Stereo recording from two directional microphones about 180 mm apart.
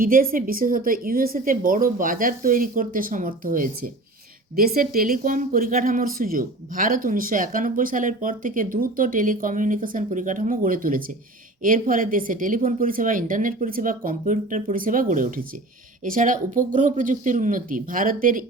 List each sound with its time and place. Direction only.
0.0 s speech: 50° right (ahead or behind)